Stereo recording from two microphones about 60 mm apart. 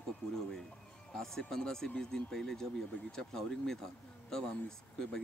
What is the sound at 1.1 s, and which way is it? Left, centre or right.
Speech, centre.